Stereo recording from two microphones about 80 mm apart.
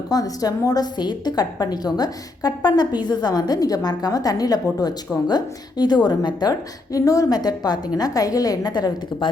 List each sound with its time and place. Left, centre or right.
0.1 s a woman's voice: left